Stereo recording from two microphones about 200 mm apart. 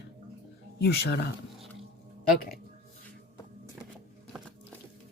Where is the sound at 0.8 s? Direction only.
55° left (ahead or behind).